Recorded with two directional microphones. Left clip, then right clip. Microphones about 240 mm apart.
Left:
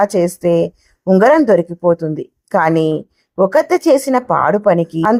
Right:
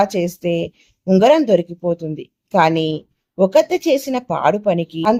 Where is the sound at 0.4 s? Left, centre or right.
Left.